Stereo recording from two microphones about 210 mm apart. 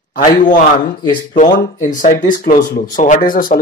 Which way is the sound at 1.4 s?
40° left (ahead or behind).